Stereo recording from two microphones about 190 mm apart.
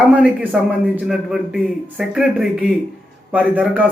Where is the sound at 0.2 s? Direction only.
5° right (ahead or behind).